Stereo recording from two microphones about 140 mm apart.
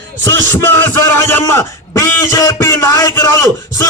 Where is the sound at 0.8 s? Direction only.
15° left (ahead or behind).